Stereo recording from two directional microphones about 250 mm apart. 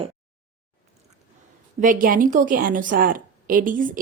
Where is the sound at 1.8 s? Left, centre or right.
Right.